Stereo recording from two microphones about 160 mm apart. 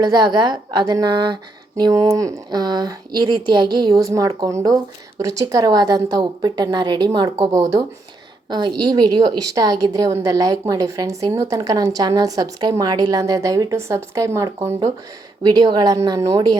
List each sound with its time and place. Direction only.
0.0 s a woman's voice: 25° right (ahead or behind)
8.4 s a woman's voice: 25° right (ahead or behind)